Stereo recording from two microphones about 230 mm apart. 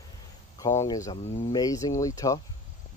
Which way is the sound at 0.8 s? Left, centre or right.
Centre.